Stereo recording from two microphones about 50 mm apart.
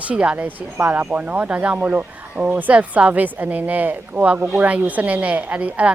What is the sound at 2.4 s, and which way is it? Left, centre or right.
Speech, right.